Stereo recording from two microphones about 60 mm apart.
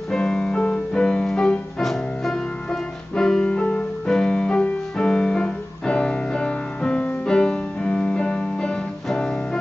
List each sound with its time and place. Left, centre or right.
0.1 s music: centre